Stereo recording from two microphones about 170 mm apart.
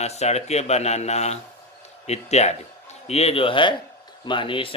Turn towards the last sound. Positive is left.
turn(degrees=30)  # may be behind; listen again after turning